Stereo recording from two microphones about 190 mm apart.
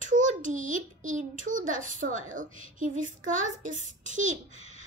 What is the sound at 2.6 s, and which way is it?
A child's voice, 45° right (ahead or behind).